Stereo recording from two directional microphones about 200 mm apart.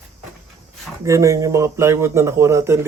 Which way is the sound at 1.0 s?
15° right (ahead or behind).